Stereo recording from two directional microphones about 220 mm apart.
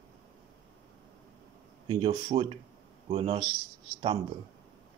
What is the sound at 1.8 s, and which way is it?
Speech, 25° right (ahead or behind).